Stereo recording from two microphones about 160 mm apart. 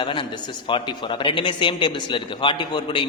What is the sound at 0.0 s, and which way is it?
A man's voice, 30° left (ahead or behind).